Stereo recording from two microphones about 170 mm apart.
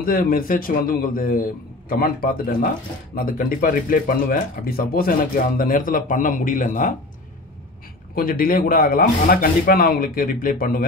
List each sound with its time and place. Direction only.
0.0 s speech: 55° left (ahead or behind)
8.1 s speech: 60° left (ahead or behind)